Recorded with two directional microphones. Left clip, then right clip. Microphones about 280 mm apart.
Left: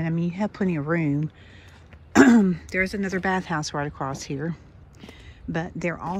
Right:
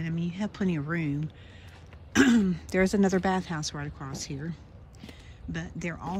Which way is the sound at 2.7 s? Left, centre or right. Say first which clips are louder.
Even; centre.